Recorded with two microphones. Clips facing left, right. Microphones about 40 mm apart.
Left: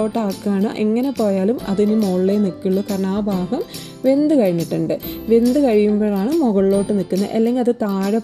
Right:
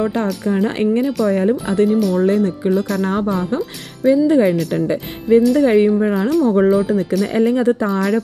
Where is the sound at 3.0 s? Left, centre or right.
Right.